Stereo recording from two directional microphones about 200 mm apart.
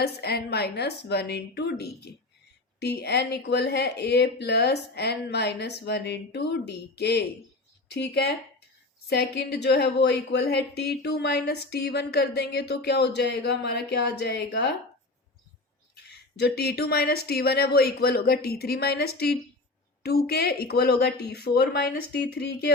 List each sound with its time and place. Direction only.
0.0 s a woman's voice: 55° left (ahead or behind)
16.0 s speech: 55° left (ahead or behind)